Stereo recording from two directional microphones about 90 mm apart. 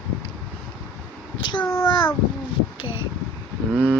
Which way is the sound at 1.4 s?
60° left (ahead or behind).